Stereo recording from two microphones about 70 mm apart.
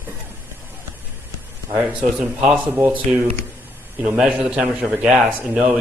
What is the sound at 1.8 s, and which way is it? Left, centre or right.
A man's voice, centre.